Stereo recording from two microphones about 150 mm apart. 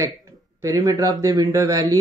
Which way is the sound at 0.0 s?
20° right (ahead or behind).